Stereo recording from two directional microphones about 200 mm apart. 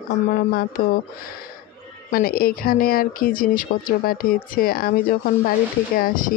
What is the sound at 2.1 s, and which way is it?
Speech, 50° left (ahead or behind).